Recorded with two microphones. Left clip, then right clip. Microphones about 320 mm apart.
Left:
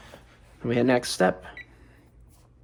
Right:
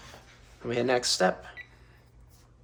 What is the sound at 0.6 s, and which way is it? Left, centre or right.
Speech, left.